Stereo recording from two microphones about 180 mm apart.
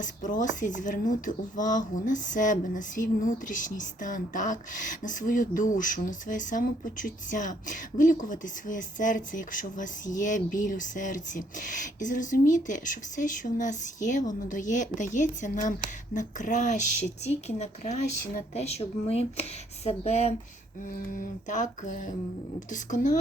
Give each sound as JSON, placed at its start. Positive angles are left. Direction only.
{"t": 0.0, "sound": "a woman's voice", "side_deg": 45}
{"t": 20.8, "sound": "speech", "side_deg": 45}